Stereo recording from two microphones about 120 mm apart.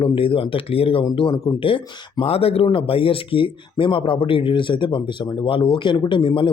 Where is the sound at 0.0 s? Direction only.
50° left (ahead or behind).